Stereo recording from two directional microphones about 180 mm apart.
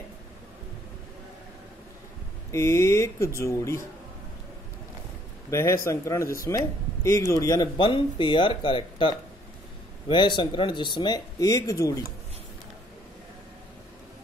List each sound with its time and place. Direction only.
2.5 s speech: 15° left (ahead or behind)
5.5 s speech: 15° left (ahead or behind)